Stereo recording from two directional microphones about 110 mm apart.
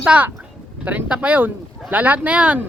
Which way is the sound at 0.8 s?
15° right (ahead or behind).